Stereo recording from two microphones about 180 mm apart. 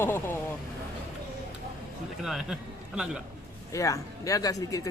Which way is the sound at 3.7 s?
20° left (ahead or behind).